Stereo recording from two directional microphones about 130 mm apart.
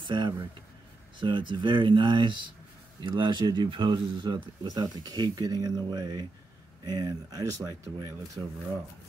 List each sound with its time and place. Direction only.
0.0 s speech: 35° right (ahead or behind)